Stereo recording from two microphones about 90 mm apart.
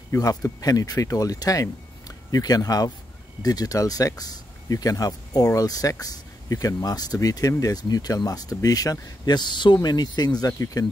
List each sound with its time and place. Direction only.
0.1 s speech: 40° left (ahead or behind)